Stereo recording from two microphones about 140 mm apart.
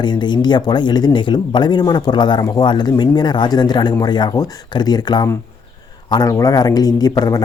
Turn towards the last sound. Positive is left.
turn(degrees=25)  # may be behind; listen again after turning